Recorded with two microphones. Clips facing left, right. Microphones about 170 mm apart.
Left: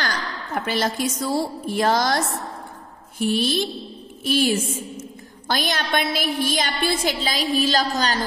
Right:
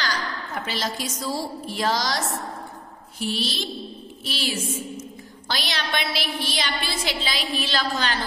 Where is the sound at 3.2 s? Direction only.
50° left (ahead or behind).